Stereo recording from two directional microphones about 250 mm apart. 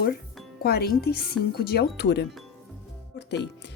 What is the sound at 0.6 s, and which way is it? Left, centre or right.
Speech, left.